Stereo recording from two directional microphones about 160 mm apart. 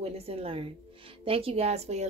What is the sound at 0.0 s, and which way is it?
A woman's voice, 40° right (ahead or behind).